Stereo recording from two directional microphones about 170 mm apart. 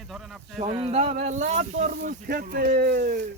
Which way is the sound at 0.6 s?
35° right (ahead or behind).